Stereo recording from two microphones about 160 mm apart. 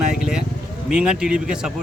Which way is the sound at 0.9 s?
5° right (ahead or behind).